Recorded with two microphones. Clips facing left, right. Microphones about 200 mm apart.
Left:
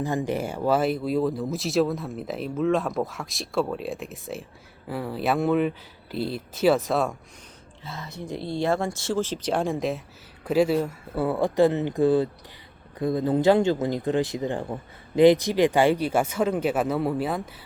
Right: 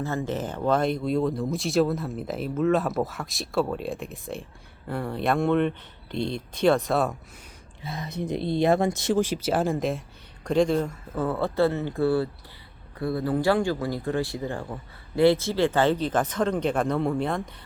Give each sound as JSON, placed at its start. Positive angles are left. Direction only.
{"t": 0.0, "sound": "speech", "side_deg": 15}
{"t": 7.9, "sound": "speech", "side_deg": -15}